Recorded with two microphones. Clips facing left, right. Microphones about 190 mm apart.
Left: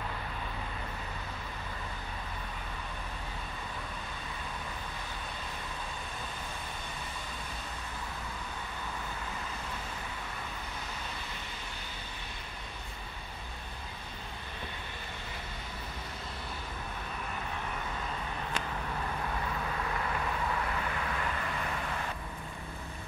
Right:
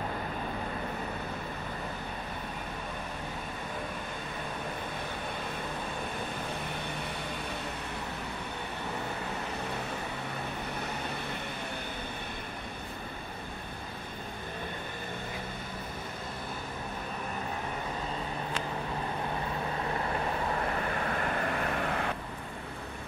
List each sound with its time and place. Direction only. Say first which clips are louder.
19.9 s vehicle: right 3 dB; 35° right (ahead or behind); by 22.1 s 60° right (ahead or behind)